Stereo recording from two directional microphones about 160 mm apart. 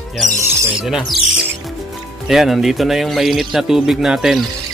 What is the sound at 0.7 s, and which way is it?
Speech, 5° right (ahead or behind).